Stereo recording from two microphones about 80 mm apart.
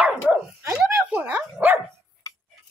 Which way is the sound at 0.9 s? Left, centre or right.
Centre.